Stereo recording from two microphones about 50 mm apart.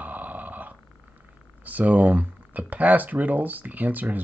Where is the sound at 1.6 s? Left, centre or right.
Right.